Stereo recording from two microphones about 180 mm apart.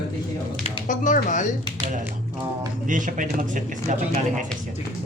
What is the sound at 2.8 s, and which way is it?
Speech, 45° right (ahead or behind).